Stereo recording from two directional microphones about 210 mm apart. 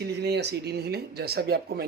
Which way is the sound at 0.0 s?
50° right (ahead or behind).